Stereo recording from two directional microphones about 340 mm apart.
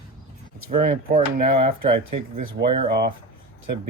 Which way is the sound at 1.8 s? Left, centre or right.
Right.